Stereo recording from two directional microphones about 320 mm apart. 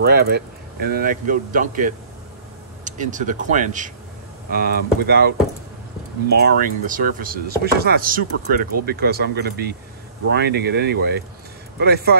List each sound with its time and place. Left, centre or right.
0.0 s chopping: right
6.3 s chopping: right
10.3 s speech: right